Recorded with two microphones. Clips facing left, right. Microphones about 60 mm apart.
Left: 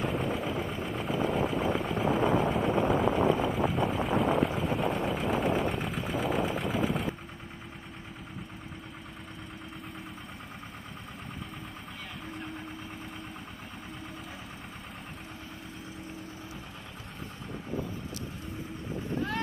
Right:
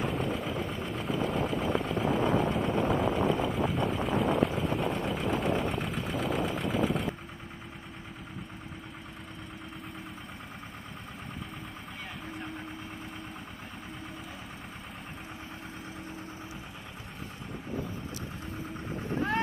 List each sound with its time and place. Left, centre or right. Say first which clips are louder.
0.0 s vehicle: left 1 dB; centre
19.1 s boat: right 3 dB; right